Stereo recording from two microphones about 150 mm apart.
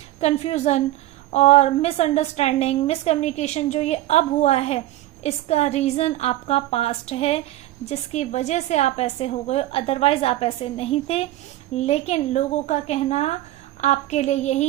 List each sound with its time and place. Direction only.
0.2 s a woman's voice: 45° left (ahead or behind)